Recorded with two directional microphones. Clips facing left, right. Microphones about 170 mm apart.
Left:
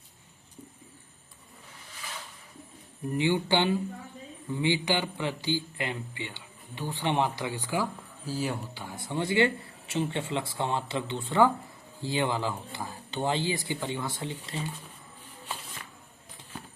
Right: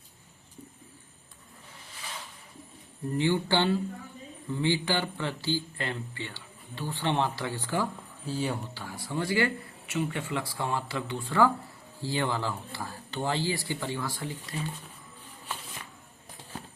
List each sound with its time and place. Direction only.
3.2 s a man's voice: 15° left (ahead or behind)
8.7 s speech: 20° left (ahead or behind)